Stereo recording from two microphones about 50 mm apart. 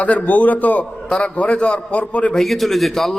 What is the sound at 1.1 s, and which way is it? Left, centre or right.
A man's voice, centre.